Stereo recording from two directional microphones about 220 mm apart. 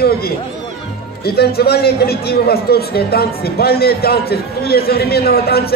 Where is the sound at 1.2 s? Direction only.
45° left (ahead or behind).